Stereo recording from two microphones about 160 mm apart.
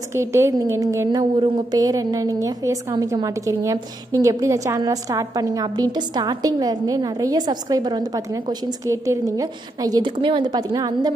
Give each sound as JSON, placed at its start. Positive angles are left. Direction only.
{"t": 0.1, "sound": "a woman's voice", "side_deg": -15}